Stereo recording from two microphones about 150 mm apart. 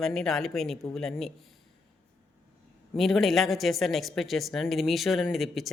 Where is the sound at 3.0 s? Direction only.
Centre (ahead or behind).